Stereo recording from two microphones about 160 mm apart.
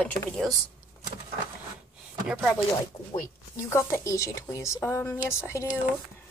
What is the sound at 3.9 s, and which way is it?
A child's voice, 20° left (ahead or behind).